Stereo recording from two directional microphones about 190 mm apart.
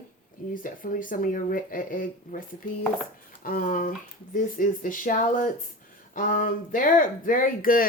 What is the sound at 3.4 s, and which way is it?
Speech, 45° left (ahead or behind).